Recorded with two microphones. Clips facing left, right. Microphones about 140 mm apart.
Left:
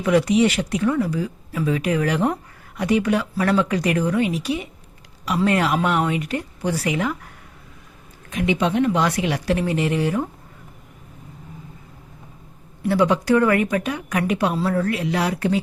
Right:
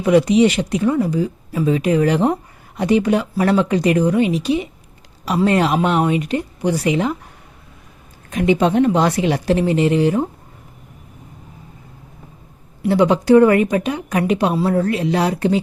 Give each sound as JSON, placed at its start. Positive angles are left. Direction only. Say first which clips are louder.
{"t": 0.0, "sound": "speech", "louder": "right 4 dB", "side_deg": -20}
{"t": 8.3, "sound": "speech", "louder": "right 5 dB", "side_deg": -40}
{"t": 12.8, "sound": "speech", "louder": "right 4 dB", "side_deg": -20}